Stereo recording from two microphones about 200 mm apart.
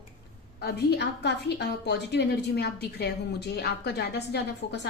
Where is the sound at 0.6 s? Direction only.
55° left (ahead or behind).